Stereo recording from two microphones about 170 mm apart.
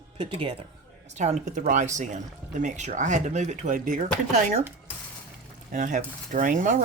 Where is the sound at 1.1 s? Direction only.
45° right (ahead or behind).